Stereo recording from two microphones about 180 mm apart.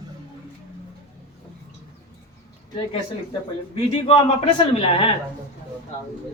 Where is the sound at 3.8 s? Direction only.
30° left (ahead or behind).